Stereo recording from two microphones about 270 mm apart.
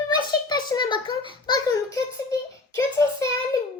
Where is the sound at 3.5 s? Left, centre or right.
Centre.